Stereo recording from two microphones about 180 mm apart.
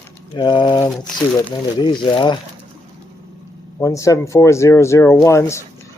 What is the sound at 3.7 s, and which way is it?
Speech, 15° left (ahead or behind).